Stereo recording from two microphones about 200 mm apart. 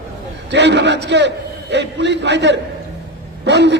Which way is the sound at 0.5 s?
60° right (ahead or behind).